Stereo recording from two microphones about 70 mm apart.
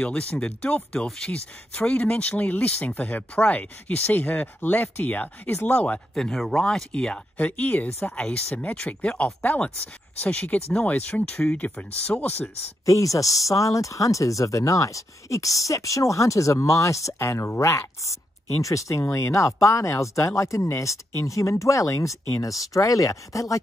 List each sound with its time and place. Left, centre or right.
0.0 s speech: centre
6.1 s speech: centre; by 12.4 s left
12.8 s speech: left